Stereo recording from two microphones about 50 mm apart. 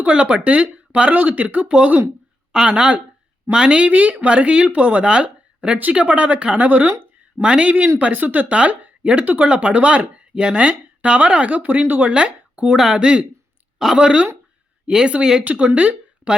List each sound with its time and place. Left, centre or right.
0.0 s speech: right
2.5 s a woman's voice: centre; by 12.1 s right
12.1 s speech: right
12.7 s speech: centre
13.0 s speech: right